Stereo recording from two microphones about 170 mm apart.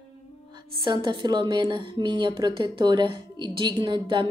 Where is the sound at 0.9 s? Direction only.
25° right (ahead or behind).